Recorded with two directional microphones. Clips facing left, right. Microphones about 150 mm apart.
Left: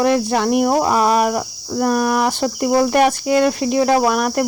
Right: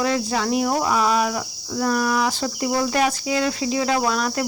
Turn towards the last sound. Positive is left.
turn(degrees=55)  # may be behind; listen again after turning